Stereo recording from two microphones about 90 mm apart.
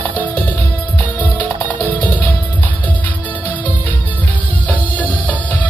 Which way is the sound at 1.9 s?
20° left (ahead or behind).